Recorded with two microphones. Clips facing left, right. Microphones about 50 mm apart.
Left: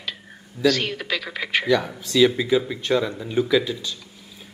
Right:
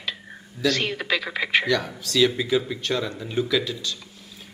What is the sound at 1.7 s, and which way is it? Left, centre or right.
Speech, centre.